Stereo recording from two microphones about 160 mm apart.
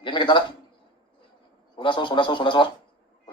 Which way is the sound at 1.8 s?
30° left (ahead or behind).